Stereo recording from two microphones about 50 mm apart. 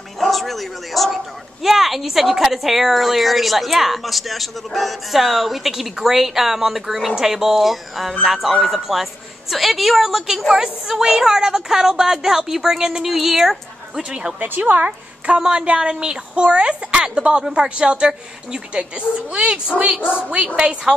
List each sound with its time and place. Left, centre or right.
0.2 s a woman's voice: centre
14.0 s speech: right
14.4 s speech: right